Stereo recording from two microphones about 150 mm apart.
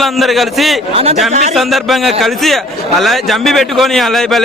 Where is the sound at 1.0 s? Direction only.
45° right (ahead or behind).